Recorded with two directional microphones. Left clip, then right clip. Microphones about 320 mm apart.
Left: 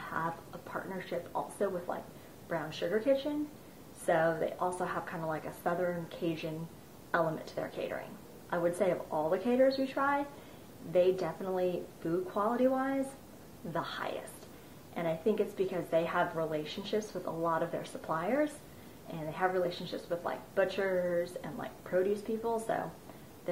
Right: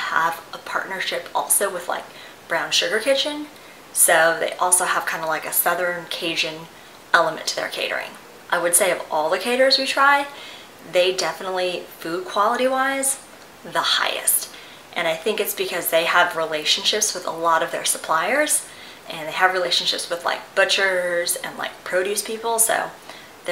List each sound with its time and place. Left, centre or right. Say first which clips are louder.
0.0 s speech: right 16 dB; centre
17.2 s speech: right 12 dB; centre
22.4 s speech: right 11 dB; right
22.7 s speech: right 13 dB; centre